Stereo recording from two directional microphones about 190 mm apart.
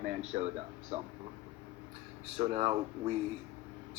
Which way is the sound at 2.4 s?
35° right (ahead or behind).